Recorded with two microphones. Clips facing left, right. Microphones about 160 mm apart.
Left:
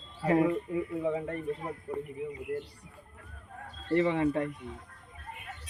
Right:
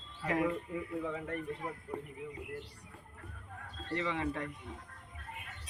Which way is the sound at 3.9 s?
30° left (ahead or behind).